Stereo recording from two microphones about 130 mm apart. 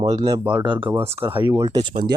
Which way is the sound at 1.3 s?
20° right (ahead or behind).